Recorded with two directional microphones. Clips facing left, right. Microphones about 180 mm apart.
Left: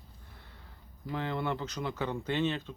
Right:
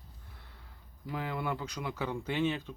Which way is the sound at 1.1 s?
5° right (ahead or behind).